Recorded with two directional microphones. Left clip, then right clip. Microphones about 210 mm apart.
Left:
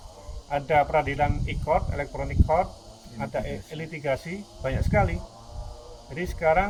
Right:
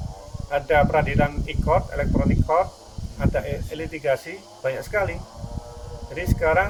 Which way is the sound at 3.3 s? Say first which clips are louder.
Right 6 dB; 5° right (ahead or behind).